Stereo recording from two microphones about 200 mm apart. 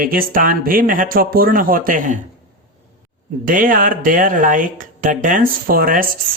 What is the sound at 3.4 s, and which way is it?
Speech, 45° right (ahead or behind).